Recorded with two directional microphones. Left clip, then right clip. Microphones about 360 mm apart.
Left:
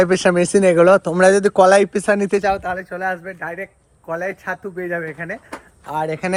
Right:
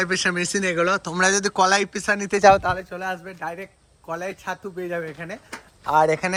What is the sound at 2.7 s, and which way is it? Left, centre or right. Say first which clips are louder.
Speech: left 4 dB; centre.